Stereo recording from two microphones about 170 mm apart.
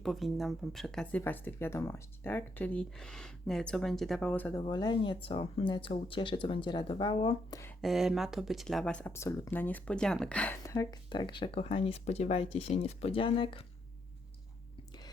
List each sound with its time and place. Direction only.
0.0 s speech: centre (ahead or behind)
4.6 s speech: 25° left (ahead or behind)
7.8 s speech: centre (ahead or behind); by 13.7 s 30° left (ahead or behind)